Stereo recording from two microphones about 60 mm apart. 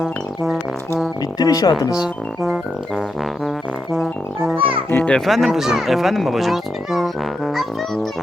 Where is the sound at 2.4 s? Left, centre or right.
Centre.